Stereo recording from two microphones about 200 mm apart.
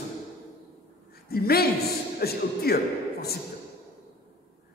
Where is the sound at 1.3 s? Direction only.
50° left (ahead or behind).